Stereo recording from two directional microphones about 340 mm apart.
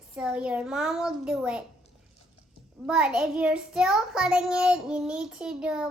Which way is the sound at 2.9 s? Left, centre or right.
Centre.